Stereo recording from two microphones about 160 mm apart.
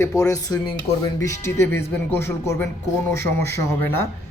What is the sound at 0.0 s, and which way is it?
Speech, 20° left (ahead or behind).